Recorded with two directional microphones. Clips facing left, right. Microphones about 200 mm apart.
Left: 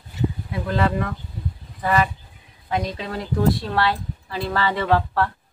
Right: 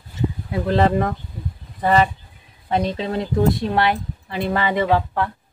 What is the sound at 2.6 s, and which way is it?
Speech, 25° right (ahead or behind).